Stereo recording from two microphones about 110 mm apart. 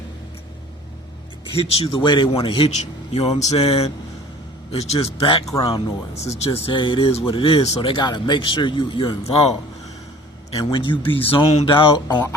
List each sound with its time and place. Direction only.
1.5 s a man's voice: 60° left (ahead or behind)
5.5 s speech: 35° left (ahead or behind)
6.2 s a man's voice: 75° left (ahead or behind)
7.8 s speech: 50° left (ahead or behind)
9.2 s speech: 65° left (ahead or behind)
10.6 s speech: 45° left (ahead or behind)
12.0 s speech: 35° left (ahead or behind)